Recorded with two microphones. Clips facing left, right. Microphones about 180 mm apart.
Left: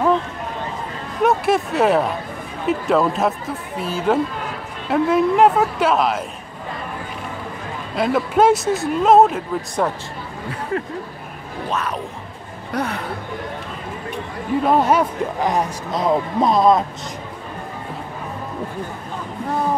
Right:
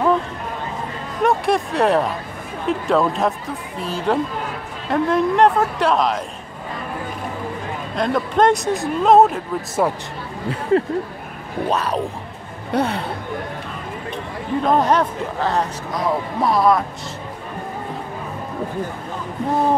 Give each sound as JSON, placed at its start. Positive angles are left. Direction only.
{"t": 1.2, "sound": "speech", "side_deg": 0}
{"t": 7.9, "sound": "speech", "side_deg": 5}
{"t": 11.7, "sound": "speech", "side_deg": -35}
{"t": 14.1, "sound": "speech", "side_deg": 5}
{"t": 15.9, "sound": "speech", "side_deg": 20}